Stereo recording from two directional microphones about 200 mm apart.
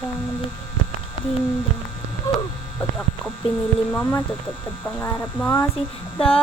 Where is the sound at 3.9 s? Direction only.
10° left (ahead or behind).